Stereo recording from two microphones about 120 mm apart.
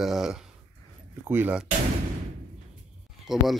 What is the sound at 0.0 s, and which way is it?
Speech, 5° right (ahead or behind).